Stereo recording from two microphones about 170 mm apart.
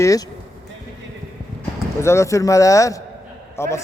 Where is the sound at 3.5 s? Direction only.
15° left (ahead or behind).